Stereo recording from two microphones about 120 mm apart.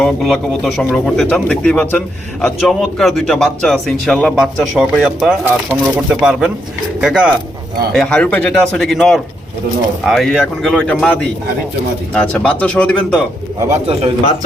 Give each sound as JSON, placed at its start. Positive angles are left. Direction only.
{"t": 0.0, "sound": "speech", "side_deg": 0}
{"t": 7.9, "sound": "speech", "side_deg": 10}
{"t": 13.7, "sound": "speech", "side_deg": -55}